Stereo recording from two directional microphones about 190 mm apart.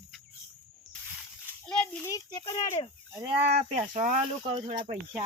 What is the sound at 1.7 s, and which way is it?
Speech, 5° left (ahead or behind).